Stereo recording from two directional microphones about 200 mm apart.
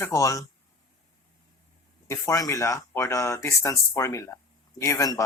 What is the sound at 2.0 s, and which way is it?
Speech, 15° left (ahead or behind).